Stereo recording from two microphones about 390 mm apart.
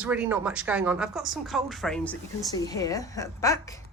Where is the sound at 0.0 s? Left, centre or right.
Centre.